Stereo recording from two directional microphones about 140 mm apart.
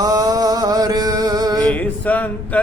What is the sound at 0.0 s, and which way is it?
Mantra, 25° right (ahead or behind).